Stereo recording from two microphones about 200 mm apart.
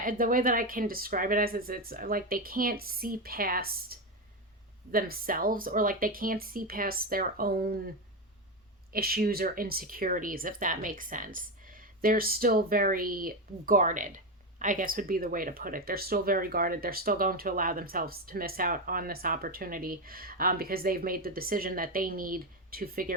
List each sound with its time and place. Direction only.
0.0 s speech: 45° right (ahead or behind)
8.9 s speech: 50° right (ahead or behind)